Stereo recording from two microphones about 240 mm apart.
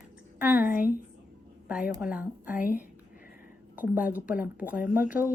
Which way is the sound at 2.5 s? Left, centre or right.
Left.